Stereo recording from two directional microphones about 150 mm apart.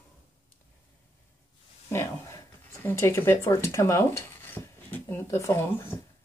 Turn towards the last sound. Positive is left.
turn(degrees=20)  # may be behind; listen again after turning